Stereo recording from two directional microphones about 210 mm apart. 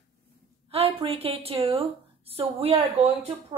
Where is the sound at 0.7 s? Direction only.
30° right (ahead or behind).